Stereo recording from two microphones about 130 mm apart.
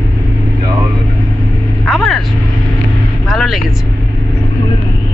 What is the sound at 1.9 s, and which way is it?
Speech, centre (ahead or behind).